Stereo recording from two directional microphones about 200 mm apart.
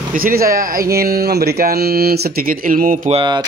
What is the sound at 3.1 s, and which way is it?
Speech, 25° right (ahead or behind).